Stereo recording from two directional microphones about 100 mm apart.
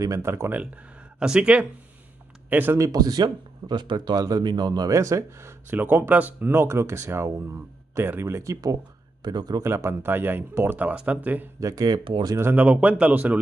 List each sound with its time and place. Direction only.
0.0 s speech: 30° right (ahead or behind)
1.2 s speech: 10° right (ahead or behind)
2.8 s speech: 40° right (ahead or behind)
9.2 s speech: 45° right (ahead or behind)
9.6 s speech: 30° right (ahead or behind)
11.6 s speech: 40° right (ahead or behind)
12.4 s speech: 20° right (ahead or behind)